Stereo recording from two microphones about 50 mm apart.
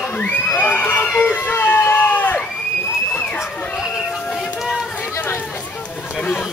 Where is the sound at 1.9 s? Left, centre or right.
Left.